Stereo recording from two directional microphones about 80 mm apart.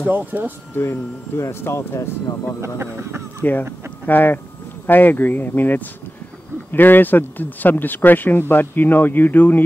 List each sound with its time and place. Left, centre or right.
0.1 s speech: right
0.7 s speech: left
2.6 s speech: right
4.0 s speech: left